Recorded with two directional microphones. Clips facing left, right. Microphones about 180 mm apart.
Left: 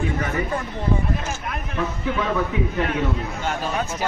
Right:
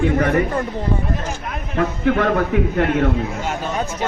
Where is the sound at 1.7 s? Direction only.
70° right (ahead or behind).